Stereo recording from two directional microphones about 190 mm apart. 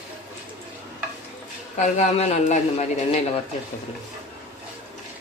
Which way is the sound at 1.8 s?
35° left (ahead or behind).